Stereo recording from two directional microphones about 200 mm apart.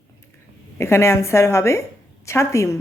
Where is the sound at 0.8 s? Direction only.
15° left (ahead or behind).